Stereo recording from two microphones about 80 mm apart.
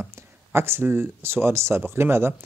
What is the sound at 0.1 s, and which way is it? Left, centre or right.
A man's voice, right.